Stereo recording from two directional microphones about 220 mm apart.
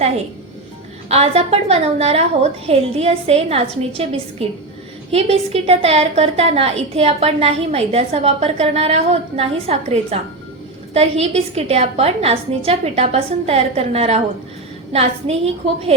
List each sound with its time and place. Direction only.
1.0 s a woman's voice: 30° right (ahead or behind)